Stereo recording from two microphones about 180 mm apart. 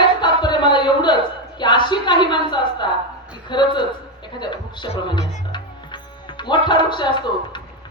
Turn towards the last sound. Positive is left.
turn(degrees=25)  # may be behind; listen again after turning